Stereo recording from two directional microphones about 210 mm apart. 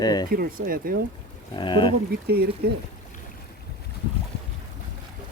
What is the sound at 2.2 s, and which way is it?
Speech, 50° right (ahead or behind).